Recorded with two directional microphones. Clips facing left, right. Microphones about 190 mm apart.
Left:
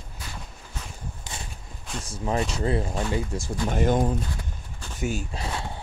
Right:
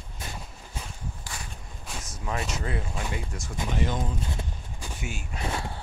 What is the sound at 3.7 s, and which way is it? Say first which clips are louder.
Speech: left 7 dB; 50° left (ahead or behind).